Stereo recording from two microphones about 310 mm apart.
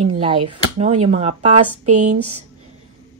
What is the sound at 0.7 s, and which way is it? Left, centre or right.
Speech, centre.